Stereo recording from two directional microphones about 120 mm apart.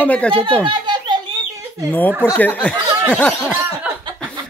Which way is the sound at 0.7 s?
40° right (ahead or behind).